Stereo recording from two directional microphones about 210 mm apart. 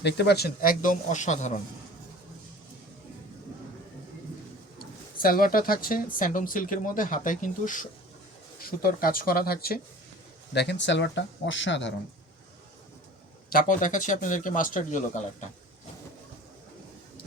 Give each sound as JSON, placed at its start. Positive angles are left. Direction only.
{"t": 0.0, "sound": "speech", "side_deg": 50}
{"t": 5.2, "sound": "speech", "side_deg": 40}
{"t": 13.5, "sound": "speech", "side_deg": 40}